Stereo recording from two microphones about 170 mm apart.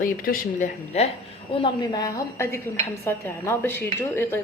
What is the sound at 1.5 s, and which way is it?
A woman's voice, 25° left (ahead or behind).